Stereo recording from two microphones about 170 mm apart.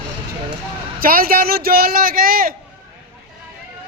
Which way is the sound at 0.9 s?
60° right (ahead or behind).